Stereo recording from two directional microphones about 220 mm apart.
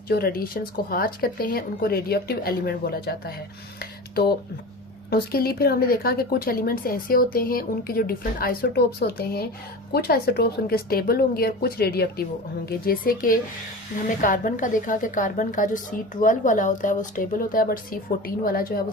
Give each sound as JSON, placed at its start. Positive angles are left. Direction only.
{"t": 0.1, "sound": "speech", "side_deg": 45}
{"t": 3.8, "sound": "a sound", "side_deg": 45}
{"t": 5.1, "sound": "a woman's voice", "side_deg": 45}